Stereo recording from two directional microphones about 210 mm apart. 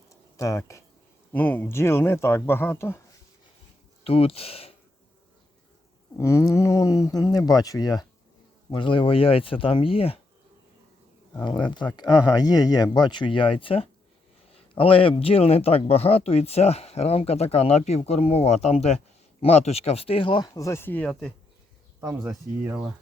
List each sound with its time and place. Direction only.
0.1 s a sound: 15° left (ahead or behind)
1.3 s speech: 10° left (ahead or behind)
4.0 s speech: 25° left (ahead or behind)
6.1 s speech: 15° left (ahead or behind)
11.4 s speech: 20° left (ahead or behind); by 22.9 s 15° right (ahead or behind)